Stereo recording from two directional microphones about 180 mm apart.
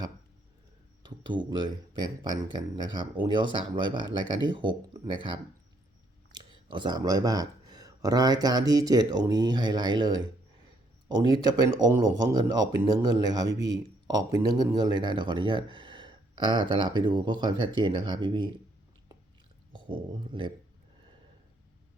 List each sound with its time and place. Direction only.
1.0 s speech: 25° right (ahead or behind)
19.7 s speech: 25° right (ahead or behind)